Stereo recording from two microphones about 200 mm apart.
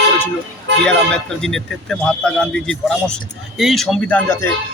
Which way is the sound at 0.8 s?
Centre (ahead or behind).